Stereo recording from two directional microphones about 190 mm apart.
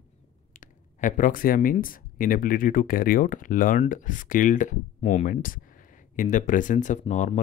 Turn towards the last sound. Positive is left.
turn(degrees=40)  # may be behind; listen again after turning